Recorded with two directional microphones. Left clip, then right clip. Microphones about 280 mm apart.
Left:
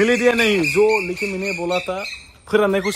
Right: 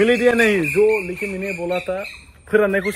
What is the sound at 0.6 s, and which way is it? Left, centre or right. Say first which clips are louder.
Speech: even; left.